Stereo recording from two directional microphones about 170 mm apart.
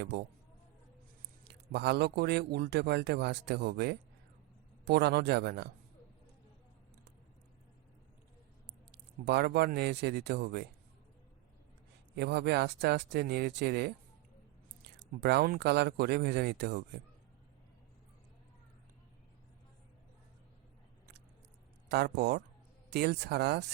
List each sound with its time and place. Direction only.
1.5 s a man's voice: 80° right
8.9 s a man's voice: 75° right (ahead or behind)
12.1 s a man's voice: 75° right (ahead or behind)
21.8 s a man's voice: 75° right (ahead or behind)